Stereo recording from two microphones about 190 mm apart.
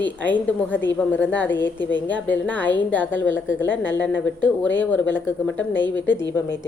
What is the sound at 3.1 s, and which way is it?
Speech, 85° left.